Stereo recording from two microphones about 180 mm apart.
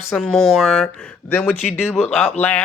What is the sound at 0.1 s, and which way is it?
Speech, 5° left (ahead or behind).